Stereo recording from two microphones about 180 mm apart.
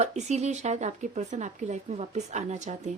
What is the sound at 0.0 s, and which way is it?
A woman's voice, 40° right (ahead or behind).